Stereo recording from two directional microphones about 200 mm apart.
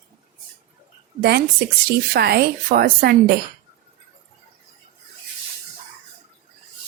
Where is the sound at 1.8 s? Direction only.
50° right (ahead or behind).